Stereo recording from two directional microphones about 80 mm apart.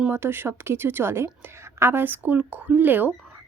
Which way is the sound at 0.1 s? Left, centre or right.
Right.